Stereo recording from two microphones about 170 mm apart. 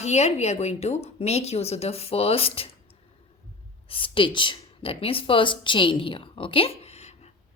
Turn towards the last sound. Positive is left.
turn(degrees=40)  # may be behind; listen again after turning